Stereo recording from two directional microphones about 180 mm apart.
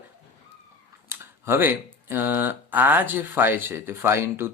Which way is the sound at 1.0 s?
15° right (ahead or behind).